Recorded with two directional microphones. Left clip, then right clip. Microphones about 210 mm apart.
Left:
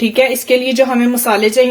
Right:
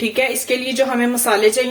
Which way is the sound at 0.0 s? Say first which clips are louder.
Left 6 dB; 40° left (ahead or behind).